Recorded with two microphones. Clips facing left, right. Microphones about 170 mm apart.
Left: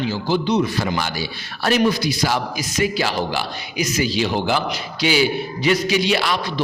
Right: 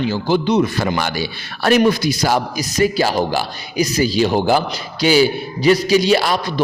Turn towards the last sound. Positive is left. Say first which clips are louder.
# right 4 dB
turn(degrees=-40)  # may be behind; listen again after turning